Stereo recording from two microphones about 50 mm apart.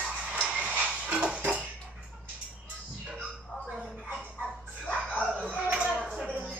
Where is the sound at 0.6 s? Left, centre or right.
Right.